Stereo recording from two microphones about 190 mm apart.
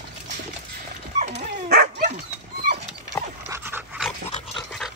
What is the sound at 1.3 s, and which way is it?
Dog, 60° right (ahead or behind).